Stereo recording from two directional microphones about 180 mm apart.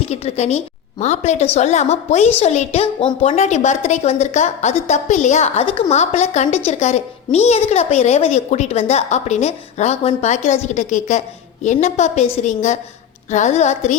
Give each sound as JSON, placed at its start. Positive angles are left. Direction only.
{"t": 0.0, "sound": "a woman's voice", "side_deg": 35}